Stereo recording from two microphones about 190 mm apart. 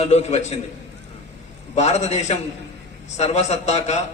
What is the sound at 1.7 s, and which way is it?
A man's voice, 35° left (ahead or behind).